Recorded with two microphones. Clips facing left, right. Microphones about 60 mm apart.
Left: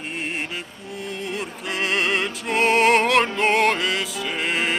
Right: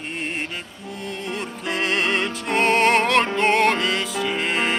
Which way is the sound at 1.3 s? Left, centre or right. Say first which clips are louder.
Right 4 dB; centre.